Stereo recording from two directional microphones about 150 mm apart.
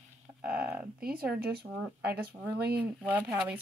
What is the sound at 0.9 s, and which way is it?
Speech, 85° right.